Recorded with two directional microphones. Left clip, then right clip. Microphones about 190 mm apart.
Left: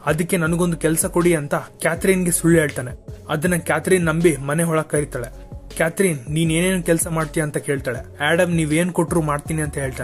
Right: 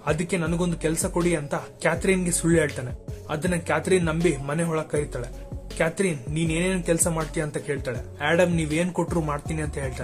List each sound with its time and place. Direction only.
0.0 s speech: 30° left (ahead or behind)